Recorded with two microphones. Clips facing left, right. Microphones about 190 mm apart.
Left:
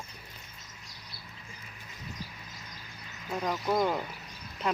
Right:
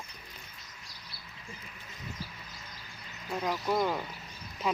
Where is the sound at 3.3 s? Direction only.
Centre (ahead or behind).